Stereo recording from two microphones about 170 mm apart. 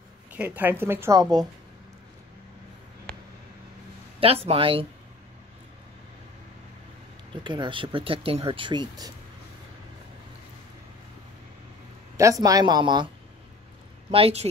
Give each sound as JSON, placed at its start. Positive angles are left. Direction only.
{"t": 0.3, "sound": "speech", "side_deg": -10}
{"t": 4.2, "sound": "speech", "side_deg": -35}
{"t": 7.4, "sound": "speech", "side_deg": -25}
{"t": 12.2, "sound": "speech", "side_deg": -20}
{"t": 14.1, "sound": "speech", "side_deg": -35}